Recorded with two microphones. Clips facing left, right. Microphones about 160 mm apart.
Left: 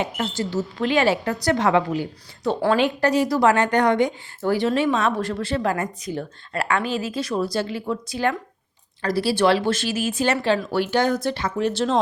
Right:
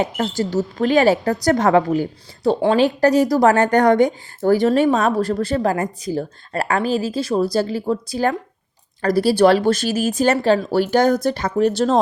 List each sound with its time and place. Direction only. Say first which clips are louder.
0.0 s a woman's voice: right 5 dB; 40° right (ahead or behind)